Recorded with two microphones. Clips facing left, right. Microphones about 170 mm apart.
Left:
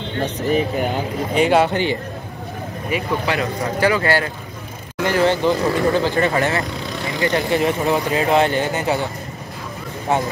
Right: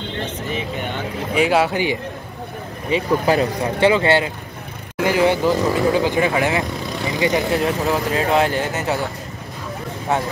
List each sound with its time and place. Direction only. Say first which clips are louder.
0.2 s speech: left 9 dB; 40° left (ahead or behind)
1.3 s speech: left 1 dB; 5° right (ahead or behind)
2.9 s speech: right 4 dB; 35° right (ahead or behind)
3.8 s speech: right 3 dB; 25° right (ahead or behind)
5.0 s speech: even; 10° right (ahead or behind)
7.5 s speech: left 1 dB; centre (ahead or behind)